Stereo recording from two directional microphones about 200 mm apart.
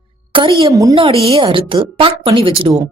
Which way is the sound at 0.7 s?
15° right (ahead or behind).